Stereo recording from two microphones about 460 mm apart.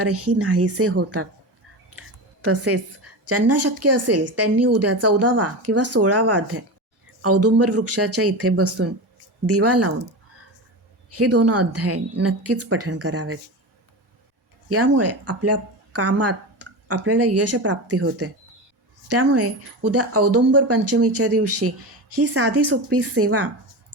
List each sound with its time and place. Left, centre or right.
0.0 s speech: right
2.4 s a woman's voice: right
11.1 s speech: right
14.7 s a woman's voice: right